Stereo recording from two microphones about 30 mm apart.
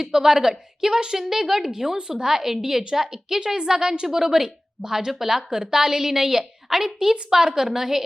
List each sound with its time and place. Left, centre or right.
0.0 s a woman's voice: centre
2.0 s a woman's voice: right
2.2 s a woman's voice: centre